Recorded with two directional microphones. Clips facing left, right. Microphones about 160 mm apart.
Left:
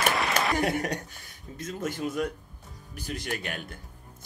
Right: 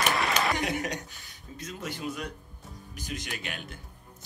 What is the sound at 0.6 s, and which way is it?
Speech, 55° left (ahead or behind).